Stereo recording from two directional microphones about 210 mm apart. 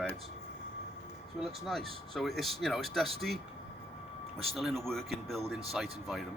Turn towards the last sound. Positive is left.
turn(degrees=0)  # may be behind; listen again after turning